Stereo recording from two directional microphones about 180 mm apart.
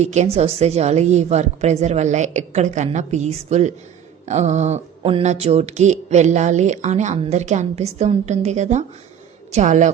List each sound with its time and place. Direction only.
0.0 s a woman's voice: 40° right (ahead or behind)